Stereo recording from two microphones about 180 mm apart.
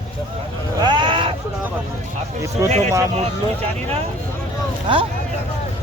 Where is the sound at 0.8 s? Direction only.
25° right (ahead or behind).